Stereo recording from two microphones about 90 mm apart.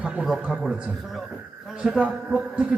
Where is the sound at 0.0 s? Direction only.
10° right (ahead or behind).